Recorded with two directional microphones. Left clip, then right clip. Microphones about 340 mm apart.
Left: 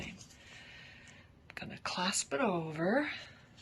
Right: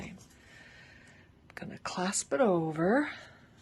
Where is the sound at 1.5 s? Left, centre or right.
Centre.